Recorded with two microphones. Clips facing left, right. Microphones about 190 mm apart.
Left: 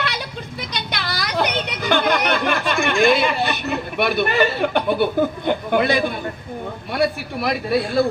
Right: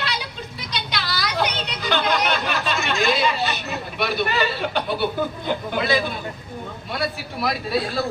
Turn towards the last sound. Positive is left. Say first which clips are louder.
# left 4 dB
turn(degrees=55)  # may be behind; listen again after turning